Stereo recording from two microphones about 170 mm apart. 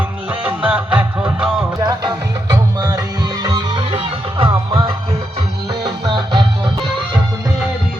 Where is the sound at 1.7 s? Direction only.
20° right (ahead or behind).